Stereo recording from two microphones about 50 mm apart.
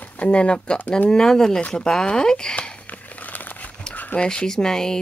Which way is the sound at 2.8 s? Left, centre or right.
Left.